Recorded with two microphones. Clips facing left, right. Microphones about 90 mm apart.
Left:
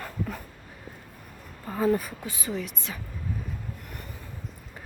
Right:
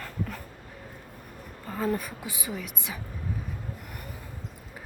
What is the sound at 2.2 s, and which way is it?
Speech, 15° right (ahead or behind).